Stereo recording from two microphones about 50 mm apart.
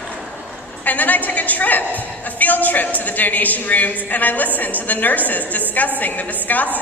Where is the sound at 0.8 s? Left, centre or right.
Left.